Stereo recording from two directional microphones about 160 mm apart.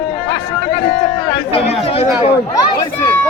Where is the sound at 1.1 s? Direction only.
40° left (ahead or behind).